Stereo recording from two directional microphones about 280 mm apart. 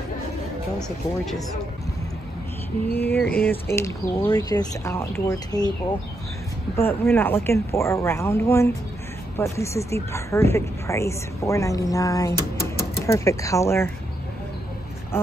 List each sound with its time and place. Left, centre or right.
0.7 s speech: centre
2.9 s speech: centre
12.4 s a sound: left
13.0 s speech: centre